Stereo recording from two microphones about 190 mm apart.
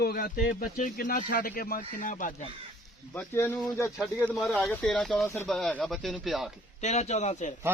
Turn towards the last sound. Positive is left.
turn(degrees=40)  # may be behind; listen again after turning